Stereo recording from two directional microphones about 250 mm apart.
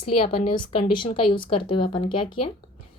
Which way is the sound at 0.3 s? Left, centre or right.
Centre.